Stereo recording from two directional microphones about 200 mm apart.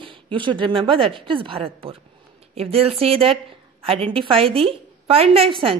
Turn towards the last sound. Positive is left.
turn(degrees=-25)  # may be behind; listen again after turning